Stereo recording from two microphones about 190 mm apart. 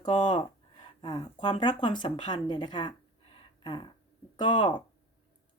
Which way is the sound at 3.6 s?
25° left (ahead or behind).